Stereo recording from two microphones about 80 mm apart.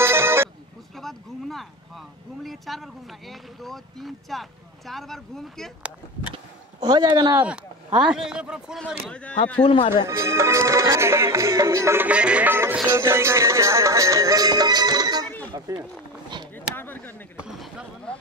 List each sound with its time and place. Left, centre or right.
0.0 s music: right
0.9 s speech: centre
5.8 s speech: centre
6.3 s a sound: right
7.4 s speech: centre
9.1 s speech: centre
9.7 s speech: left
10.0 s music: right
12.0 s speech: centre
12.4 s music: right
16.7 s a sound: left
17.4 s basketball bounce: centre